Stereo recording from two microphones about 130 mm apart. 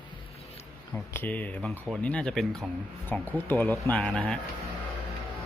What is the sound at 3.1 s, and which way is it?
Speech, 15° left (ahead or behind).